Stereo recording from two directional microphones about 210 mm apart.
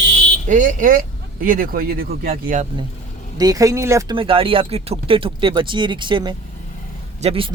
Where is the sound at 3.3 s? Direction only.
15° right (ahead or behind).